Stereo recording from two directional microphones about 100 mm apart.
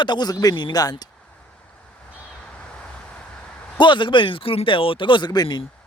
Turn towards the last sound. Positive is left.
turn(degrees=45)  # may be behind; listen again after turning